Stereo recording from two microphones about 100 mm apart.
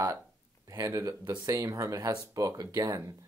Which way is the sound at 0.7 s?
35° right (ahead or behind).